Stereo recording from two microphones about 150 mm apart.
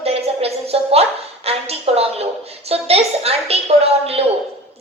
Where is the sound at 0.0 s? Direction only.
40° right (ahead or behind).